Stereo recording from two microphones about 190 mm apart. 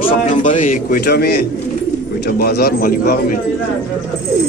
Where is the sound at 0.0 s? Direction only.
40° left (ahead or behind).